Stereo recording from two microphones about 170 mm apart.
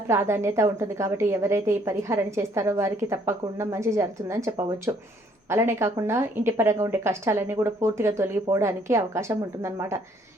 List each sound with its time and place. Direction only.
0.1 s a woman's voice: 15° right (ahead or behind)